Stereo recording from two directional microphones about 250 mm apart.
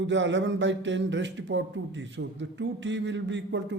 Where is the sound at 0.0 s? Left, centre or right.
Right.